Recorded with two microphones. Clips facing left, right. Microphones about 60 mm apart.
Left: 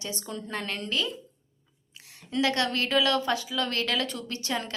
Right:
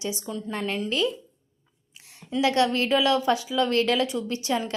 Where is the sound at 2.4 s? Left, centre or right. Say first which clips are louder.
Right 6 dB; right.